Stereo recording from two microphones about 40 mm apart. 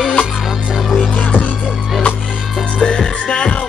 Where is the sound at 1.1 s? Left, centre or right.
Left.